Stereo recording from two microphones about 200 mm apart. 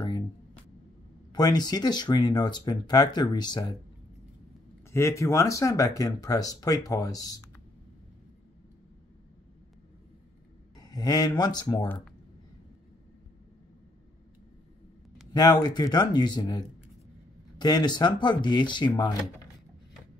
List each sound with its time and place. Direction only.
1.3 s speech: 20° left (ahead or behind)
4.9 s speech: 15° left (ahead or behind)
10.8 s speech: 20° left (ahead or behind)
15.3 s speech: 20° left (ahead or behind)